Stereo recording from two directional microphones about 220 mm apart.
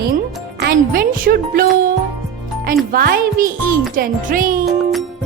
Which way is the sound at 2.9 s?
45° right (ahead or behind).